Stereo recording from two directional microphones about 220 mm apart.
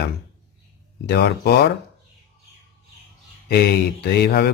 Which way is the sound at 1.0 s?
45° left (ahead or behind).